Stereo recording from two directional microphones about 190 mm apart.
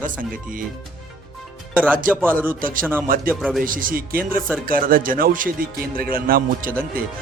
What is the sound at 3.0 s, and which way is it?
Speech, 50° right (ahead or behind).